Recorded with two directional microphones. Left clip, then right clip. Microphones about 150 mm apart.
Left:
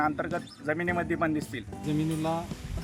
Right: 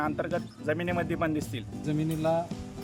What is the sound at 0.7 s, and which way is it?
Speech, 30° right (ahead or behind).